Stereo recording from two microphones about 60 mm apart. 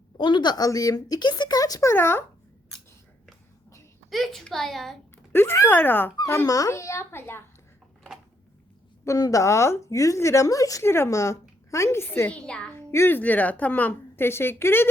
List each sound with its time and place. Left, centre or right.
0.5 s speech: left
1.8 s speech: left
4.1 s a child's voice: centre
5.3 s speech: left
6.4 s a woman's voice: left
9.0 s a woman's voice: left
10.8 s speech: left
12.3 s a woman's voice: centre
12.7 s a woman's voice: left
13.1 s speech: left
14.3 s speech: left